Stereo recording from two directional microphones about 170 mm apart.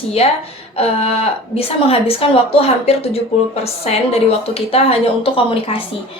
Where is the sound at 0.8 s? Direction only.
35° left (ahead or behind).